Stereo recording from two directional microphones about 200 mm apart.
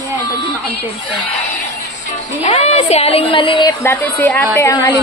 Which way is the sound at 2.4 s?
30° left (ahead or behind).